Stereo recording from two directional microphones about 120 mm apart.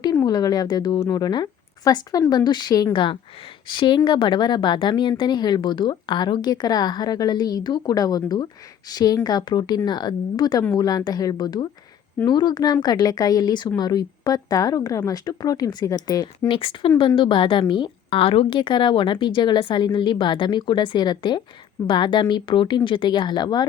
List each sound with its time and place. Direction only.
0.3 s a woman's voice: 35° left (ahead or behind)
16.5 s a woman's voice: 50° left (ahead or behind)